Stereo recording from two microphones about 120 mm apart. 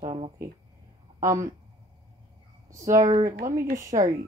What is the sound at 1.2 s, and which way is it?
Speech, 25° right (ahead or behind).